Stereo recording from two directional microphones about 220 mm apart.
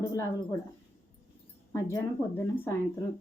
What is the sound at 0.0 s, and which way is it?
Speech, 15° left (ahead or behind).